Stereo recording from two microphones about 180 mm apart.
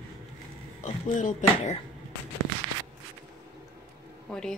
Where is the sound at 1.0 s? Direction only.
45° left (ahead or behind).